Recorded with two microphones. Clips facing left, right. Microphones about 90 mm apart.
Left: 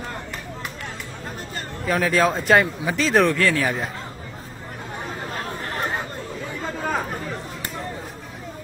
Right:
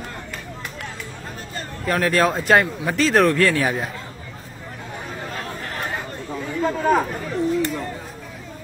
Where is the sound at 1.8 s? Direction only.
Centre (ahead or behind).